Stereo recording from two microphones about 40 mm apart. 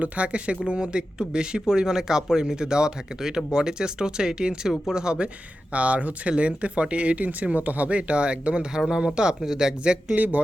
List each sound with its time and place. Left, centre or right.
0.0 s speech: right
5.7 s speech: right
10.2 s speech: right